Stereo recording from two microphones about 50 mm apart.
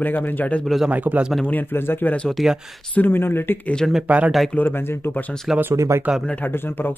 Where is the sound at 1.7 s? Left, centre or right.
Left.